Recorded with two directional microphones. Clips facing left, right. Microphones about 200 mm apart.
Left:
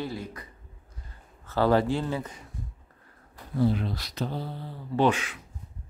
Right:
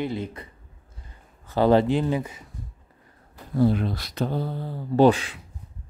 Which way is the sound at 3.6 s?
55° right (ahead or behind).